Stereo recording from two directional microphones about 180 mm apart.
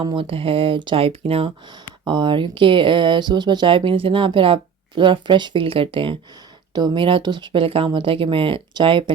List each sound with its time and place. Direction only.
0.0 s speech: 25° right (ahead or behind)